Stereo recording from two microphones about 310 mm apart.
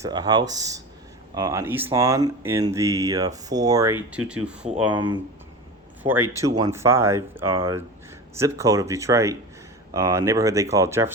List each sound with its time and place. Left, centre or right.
0.0 s speech: centre